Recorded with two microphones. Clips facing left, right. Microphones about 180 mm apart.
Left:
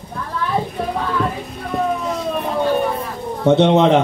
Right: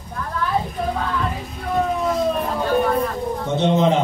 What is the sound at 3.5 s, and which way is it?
Speech, 70° left (ahead or behind).